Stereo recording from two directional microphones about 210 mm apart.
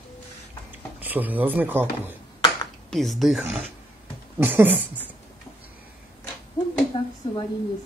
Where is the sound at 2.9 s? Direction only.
Centre (ahead or behind).